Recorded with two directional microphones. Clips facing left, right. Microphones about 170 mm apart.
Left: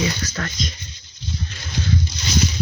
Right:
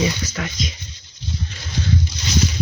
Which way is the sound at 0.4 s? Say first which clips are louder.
Right 1 dB; 10° right (ahead or behind).